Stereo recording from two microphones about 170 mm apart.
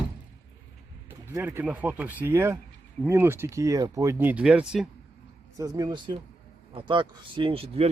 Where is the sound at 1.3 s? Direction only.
15° right (ahead or behind).